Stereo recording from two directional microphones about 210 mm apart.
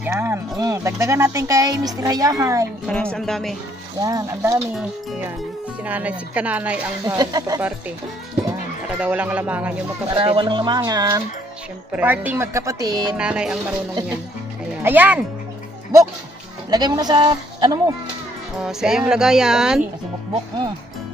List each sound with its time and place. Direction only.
0.0 s speech: 10° right (ahead or behind)
2.9 s speech: 5° left (ahead or behind)
4.0 s speech: 15° right (ahead or behind)
5.9 s speech: 5° right (ahead or behind)
7.2 s speech: 15° right (ahead or behind)
9.0 s speech: 5° right (ahead or behind)
10.1 s speech: 25° right (ahead or behind)
11.9 s speech: 5° right (ahead or behind)
13.2 s speech: 5° right (ahead or behind)
14.8 s speech: 10° right (ahead or behind)
16.7 s speech: 20° right (ahead or behind)
18.6 s speech: 5° right (ahead or behind)